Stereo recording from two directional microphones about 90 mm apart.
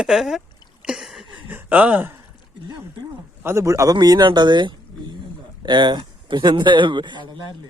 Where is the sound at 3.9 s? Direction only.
50° right (ahead or behind).